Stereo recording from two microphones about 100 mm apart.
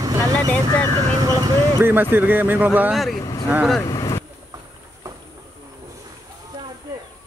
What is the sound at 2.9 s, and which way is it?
Speech, centre (ahead or behind).